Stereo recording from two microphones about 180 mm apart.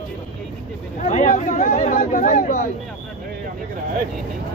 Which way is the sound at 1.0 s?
40° left (ahead or behind).